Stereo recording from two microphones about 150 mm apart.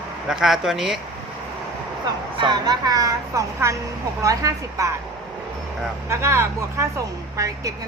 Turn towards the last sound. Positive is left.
turn(degrees=-20)  # may be behind; listen again after turning